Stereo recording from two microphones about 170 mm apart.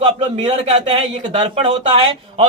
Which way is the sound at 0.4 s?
35° right (ahead or behind).